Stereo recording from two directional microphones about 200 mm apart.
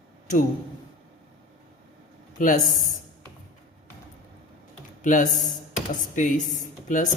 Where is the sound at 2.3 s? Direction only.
40° left (ahead or behind).